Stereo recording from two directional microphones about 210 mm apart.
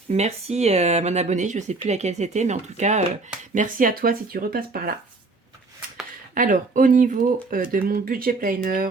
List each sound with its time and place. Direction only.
0.1 s speech: 30° right (ahead or behind)
6.3 s speech: 40° right (ahead or behind)